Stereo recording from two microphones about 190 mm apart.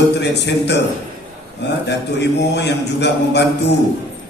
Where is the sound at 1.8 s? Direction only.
65° left (ahead or behind).